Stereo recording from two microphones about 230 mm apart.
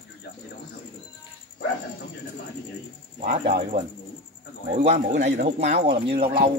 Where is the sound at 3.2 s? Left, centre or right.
Right.